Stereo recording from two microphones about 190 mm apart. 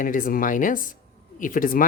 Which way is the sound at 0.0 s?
45° left (ahead or behind).